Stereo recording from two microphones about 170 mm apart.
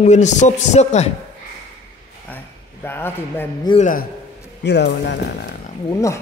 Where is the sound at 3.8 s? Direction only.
55° left (ahead or behind).